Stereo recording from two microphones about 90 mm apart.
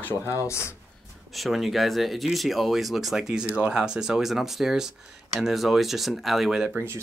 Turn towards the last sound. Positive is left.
turn(degrees=-30)  # may be behind; listen again after turning